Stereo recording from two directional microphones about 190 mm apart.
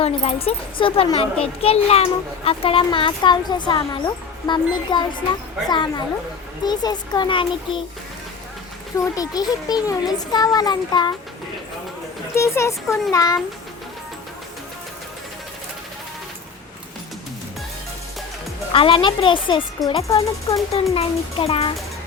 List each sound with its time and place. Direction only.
0.0 s a child's voice: 30° left (ahead or behind)
9.0 s a child's voice: 20° left (ahead or behind)
12.3 s a child's voice: 15° left (ahead or behind)
18.7 s a child's voice: 30° left (ahead or behind)
20.9 s a child's voice: 30° left (ahead or behind)